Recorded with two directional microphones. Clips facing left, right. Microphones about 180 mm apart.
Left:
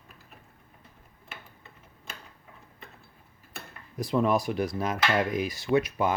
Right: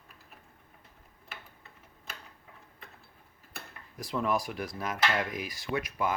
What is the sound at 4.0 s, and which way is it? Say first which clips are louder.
Speech: left 6 dB; 20° left (ahead or behind).